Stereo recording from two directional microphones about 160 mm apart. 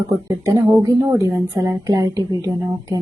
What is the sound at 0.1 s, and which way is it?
A woman's voice, 20° right (ahead or behind).